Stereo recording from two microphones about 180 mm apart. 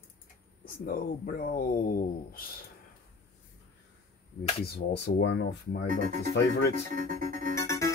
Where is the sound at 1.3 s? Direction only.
50° left (ahead or behind).